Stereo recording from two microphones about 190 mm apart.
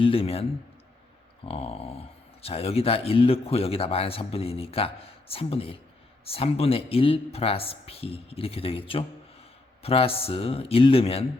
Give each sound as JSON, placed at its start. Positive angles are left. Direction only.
{"t": 0.0, "sound": "speech", "side_deg": 30}
{"t": 1.5, "sound": "speech", "side_deg": 30}